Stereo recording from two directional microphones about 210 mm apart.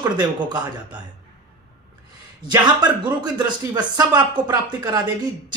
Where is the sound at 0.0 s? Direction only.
20° right (ahead or behind).